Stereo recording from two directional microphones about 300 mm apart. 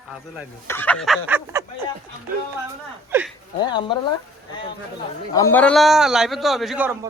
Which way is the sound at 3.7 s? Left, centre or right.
Centre.